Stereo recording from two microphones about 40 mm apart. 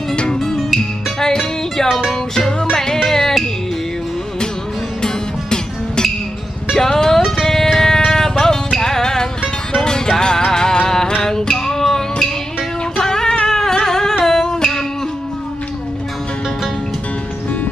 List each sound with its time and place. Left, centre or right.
0.1 s music: left
0.4 s music: centre
3.1 s music: centre
5.0 s music: centre
14.2 s humming: centre